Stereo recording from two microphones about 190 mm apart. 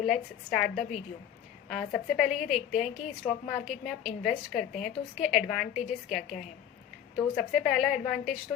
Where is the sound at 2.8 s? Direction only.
35° left (ahead or behind).